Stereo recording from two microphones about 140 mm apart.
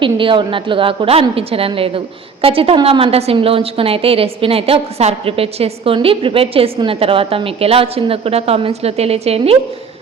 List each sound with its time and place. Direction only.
0.0 s a woman's voice: 35° right (ahead or behind)